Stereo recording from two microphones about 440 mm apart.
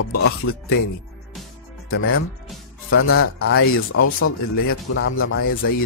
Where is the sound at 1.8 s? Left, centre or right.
Left.